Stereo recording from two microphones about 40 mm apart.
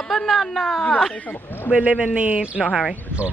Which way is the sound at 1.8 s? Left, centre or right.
Right.